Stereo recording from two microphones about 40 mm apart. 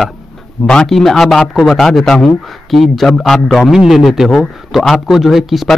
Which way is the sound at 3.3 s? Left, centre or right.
Centre.